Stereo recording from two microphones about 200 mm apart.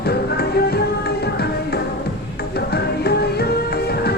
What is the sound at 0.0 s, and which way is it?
Music, 50° left (ahead or behind).